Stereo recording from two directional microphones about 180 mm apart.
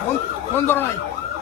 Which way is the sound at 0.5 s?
10° left (ahead or behind).